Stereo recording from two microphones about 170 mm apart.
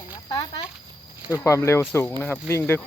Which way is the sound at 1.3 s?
15° left (ahead or behind).